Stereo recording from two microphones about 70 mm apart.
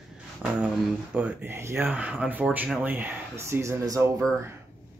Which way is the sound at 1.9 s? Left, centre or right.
Right.